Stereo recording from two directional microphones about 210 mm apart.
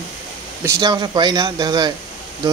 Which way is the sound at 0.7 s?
20° right (ahead or behind).